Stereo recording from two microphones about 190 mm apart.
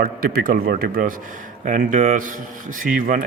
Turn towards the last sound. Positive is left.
turn(degrees=-45)  # may be behind; listen again after turning